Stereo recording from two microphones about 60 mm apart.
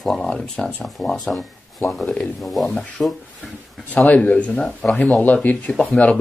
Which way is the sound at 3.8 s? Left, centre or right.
Left.